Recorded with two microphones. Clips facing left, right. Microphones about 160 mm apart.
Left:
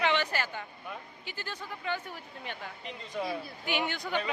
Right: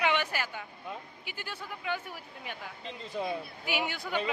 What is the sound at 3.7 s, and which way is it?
Speech, 5° right (ahead or behind).